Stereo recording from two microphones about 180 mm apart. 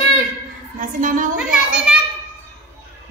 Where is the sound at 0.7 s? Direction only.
45° right (ahead or behind).